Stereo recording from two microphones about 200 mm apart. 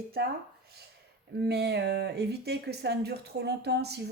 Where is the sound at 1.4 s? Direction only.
55° right (ahead or behind).